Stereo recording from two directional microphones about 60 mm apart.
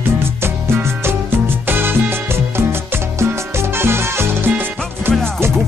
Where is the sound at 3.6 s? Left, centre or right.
Right.